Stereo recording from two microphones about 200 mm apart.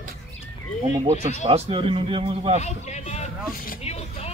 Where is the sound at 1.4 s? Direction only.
30° right (ahead or behind).